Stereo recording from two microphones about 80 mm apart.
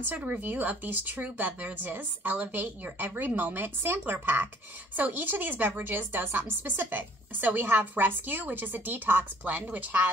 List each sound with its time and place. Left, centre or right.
0.0 s a woman's voice: right